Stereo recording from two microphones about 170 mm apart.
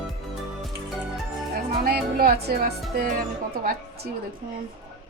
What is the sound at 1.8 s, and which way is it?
Speech, 65° right (ahead or behind).